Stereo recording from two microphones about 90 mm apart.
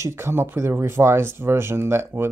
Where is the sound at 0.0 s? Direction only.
30° right (ahead or behind).